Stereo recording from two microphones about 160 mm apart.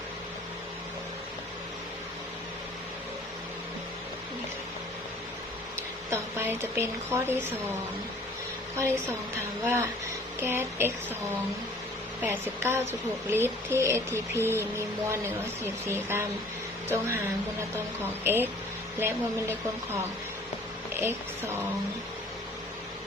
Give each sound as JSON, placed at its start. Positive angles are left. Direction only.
{"t": 6.1, "sound": "speech", "side_deg": -15}
{"t": 8.7, "sound": "a woman's voice", "side_deg": -20}
{"t": 12.2, "sound": "speech", "side_deg": -15}
{"t": 18.2, "sound": "speech", "side_deg": -15}
{"t": 21.0, "sound": "speech", "side_deg": -15}